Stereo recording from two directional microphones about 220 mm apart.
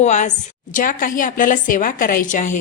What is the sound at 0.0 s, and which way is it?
A woman's voice, 35° left (ahead or behind).